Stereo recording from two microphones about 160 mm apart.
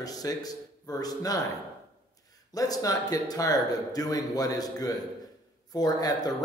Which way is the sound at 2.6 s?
25° left (ahead or behind).